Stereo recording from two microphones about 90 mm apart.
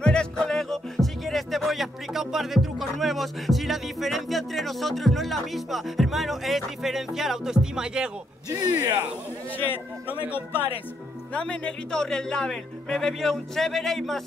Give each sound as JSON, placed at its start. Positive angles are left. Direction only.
{"t": 0.0, "sound": "music", "side_deg": 10}
{"t": 8.5, "sound": "speech", "side_deg": -45}
{"t": 9.6, "sound": "speech", "side_deg": 20}
{"t": 11.3, "sound": "speech", "side_deg": 10}